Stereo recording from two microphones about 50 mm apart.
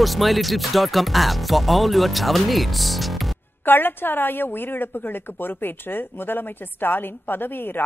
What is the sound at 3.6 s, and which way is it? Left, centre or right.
A woman's voice, left.